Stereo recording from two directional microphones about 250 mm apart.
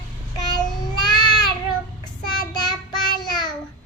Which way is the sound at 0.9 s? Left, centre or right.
Centre.